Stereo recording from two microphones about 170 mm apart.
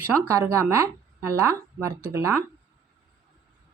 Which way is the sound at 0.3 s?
15° right (ahead or behind).